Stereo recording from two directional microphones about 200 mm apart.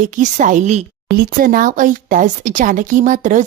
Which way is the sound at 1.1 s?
45° right (ahead or behind).